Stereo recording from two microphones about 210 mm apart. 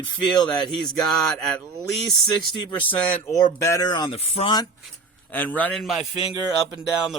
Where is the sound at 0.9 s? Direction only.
Centre (ahead or behind); by 4.7 s 25° left (ahead or behind).